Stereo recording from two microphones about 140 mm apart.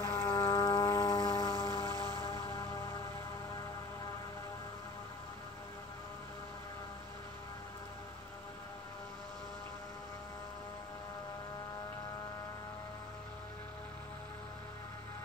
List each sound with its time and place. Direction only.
0.0 s music: 25° left (ahead or behind)